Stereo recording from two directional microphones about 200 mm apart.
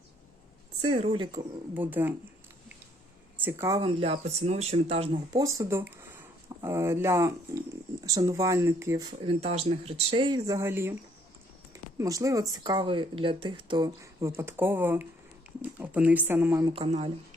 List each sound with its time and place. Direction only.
0.8 s speech: 25° right (ahead or behind)
1.7 s speech: 10° right (ahead or behind)
3.3 s speech: 10° right (ahead or behind)
3.8 s speech: 30° right (ahead or behind)
5.3 s speech: 15° right (ahead or behind)
9.4 s speech: 30° right (ahead or behind); by 16.7 s 15° right (ahead or behind)
16.7 s speech: 30° right (ahead or behind)